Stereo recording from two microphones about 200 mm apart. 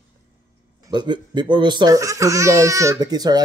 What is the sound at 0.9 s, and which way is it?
Speech, 20° right (ahead or behind).